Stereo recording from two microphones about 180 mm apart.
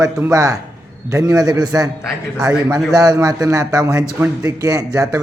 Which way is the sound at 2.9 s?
20° right (ahead or behind).